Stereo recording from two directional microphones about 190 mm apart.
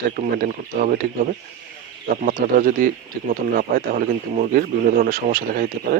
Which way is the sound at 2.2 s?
45° right (ahead or behind).